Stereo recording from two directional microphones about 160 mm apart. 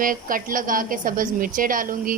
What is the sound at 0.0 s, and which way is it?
A woman's voice, 60° right (ahead or behind).